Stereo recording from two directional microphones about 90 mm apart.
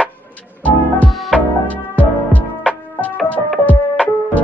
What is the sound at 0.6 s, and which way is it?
Music, 15° left (ahead or behind).